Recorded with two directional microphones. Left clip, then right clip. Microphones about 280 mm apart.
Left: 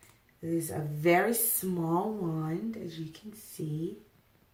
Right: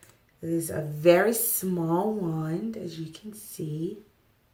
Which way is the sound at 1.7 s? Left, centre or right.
Centre.